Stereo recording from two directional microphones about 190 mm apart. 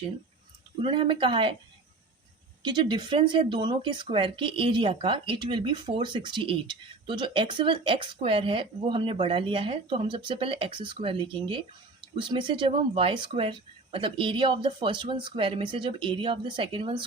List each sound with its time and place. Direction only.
0.8 s speech: 25° right (ahead or behind)
2.6 s speech: 25° right (ahead or behind)